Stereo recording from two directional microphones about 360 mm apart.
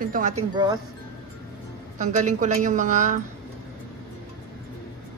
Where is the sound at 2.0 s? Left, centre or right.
Right.